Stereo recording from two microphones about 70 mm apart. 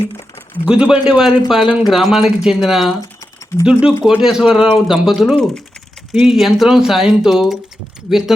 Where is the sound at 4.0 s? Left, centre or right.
Centre.